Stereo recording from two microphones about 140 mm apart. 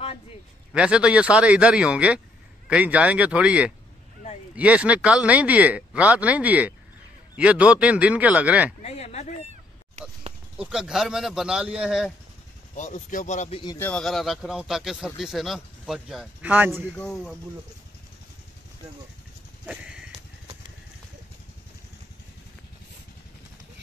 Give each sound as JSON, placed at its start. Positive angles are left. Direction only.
{"t": 0.7, "sound": "speech", "side_deg": -5}
{"t": 8.8, "sound": "speech", "side_deg": 50}
{"t": 9.5, "sound": "cat", "side_deg": -50}
{"t": 10.6, "sound": "speech", "side_deg": -5}
{"t": 12.7, "sound": "speech", "side_deg": 60}
{"t": 13.7, "sound": "speech", "side_deg": 10}
{"t": 14.0, "sound": "speech", "side_deg": 0}
{"t": 16.9, "sound": "speech", "side_deg": 10}
{"t": 19.6, "sound": "horse", "side_deg": -5}